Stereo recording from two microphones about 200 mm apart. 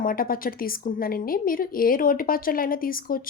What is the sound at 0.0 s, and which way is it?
Speech, 45° left (ahead or behind).